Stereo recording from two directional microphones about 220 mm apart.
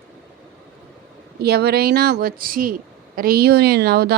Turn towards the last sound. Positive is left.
turn(degrees=-45)  # may be behind; listen again after turning